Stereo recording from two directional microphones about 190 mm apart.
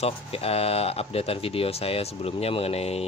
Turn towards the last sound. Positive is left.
turn(degrees=30)  # may be behind; listen again after turning